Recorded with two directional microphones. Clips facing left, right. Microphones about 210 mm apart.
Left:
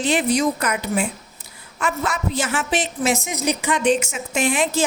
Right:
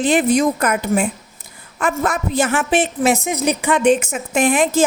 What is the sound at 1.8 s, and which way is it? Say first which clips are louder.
A woman's voice: right 4 dB; 55° right (ahead or behind).